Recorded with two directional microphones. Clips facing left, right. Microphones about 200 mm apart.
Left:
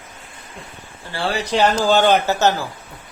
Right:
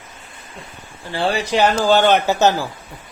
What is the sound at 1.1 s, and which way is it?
Speech, 15° right (ahead or behind).